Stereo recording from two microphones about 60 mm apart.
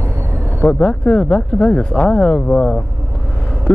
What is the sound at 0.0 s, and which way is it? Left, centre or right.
Vehicle, right.